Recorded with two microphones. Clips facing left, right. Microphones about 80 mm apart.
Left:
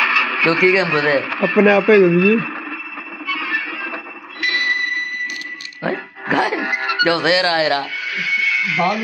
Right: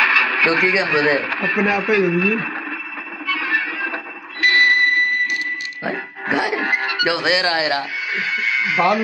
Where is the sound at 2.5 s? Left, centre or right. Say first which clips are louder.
Right 1 dB; centre.